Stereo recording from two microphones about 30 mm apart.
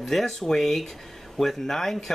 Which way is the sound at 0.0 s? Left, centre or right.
Centre.